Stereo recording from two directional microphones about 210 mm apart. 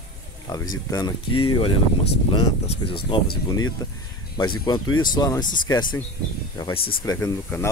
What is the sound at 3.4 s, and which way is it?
Speech, 20° left (ahead or behind).